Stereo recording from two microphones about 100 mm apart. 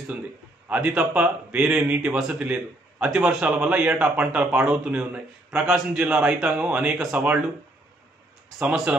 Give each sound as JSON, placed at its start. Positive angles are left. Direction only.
{"t": 0.7, "sound": "a man's voice", "side_deg": -10}
{"t": 8.5, "sound": "a man's voice", "side_deg": -5}